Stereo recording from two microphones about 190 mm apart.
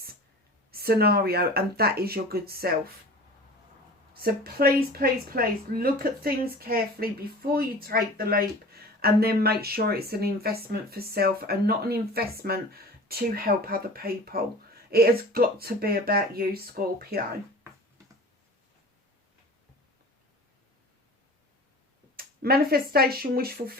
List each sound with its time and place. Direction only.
0.7 s speech: 55° right (ahead or behind)
4.1 s speech: 55° right (ahead or behind)
22.1 s speech: 55° right (ahead or behind)